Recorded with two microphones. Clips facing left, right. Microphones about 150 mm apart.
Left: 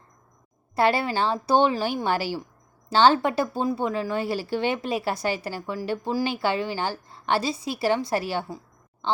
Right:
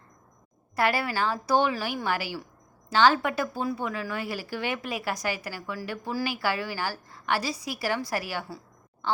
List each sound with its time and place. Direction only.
0.8 s a woman's voice: 25° left (ahead or behind)